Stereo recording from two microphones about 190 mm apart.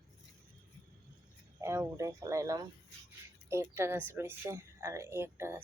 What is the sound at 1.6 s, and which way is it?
A woman's voice, 15° right (ahead or behind).